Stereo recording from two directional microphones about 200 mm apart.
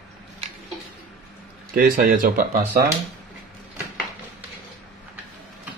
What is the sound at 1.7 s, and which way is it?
Speech, 45° right (ahead or behind).